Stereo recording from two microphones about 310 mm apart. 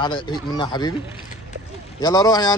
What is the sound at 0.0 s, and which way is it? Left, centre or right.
Speech, centre.